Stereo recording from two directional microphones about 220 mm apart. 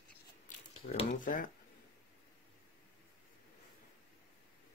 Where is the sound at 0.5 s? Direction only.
30° left (ahead or behind).